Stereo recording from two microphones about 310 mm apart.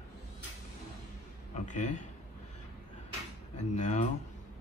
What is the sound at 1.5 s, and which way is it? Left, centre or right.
Speech, left.